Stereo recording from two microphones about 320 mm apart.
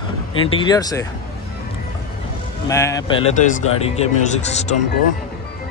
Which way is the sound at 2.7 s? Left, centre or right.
Centre.